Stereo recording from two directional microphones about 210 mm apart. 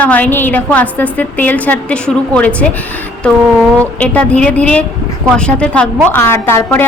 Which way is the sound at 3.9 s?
5° left (ahead or behind).